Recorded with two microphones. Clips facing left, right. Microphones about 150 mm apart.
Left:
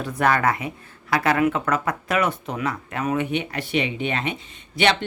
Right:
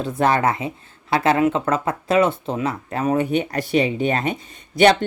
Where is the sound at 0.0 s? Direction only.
25° right (ahead or behind).